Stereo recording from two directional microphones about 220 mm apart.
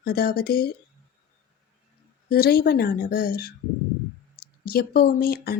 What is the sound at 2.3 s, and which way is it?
Speech, 45° left (ahead or behind).